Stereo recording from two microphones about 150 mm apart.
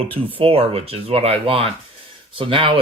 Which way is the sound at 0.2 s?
35° right (ahead or behind).